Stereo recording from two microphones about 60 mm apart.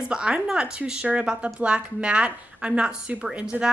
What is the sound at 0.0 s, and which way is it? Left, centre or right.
A woman's voice, centre.